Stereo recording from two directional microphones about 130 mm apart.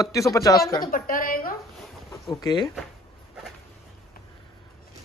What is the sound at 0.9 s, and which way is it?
Speech, 90° left.